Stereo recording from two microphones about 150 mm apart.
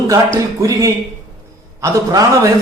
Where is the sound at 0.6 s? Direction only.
20° right (ahead or behind).